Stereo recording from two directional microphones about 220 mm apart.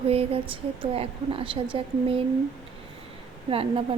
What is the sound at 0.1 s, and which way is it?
A woman's voice, 25° right (ahead or behind).